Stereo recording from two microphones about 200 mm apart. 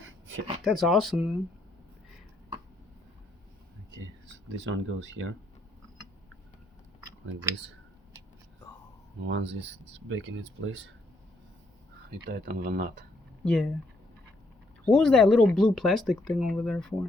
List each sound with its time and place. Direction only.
0.6 s speech: centre (ahead or behind)
4.6 s speech: 65° right (ahead or behind)
9.2 s speech: 60° right (ahead or behind)
12.1 s speech: 50° right (ahead or behind)
13.4 s speech: 5° left (ahead or behind)
14.8 s speech: centre (ahead or behind)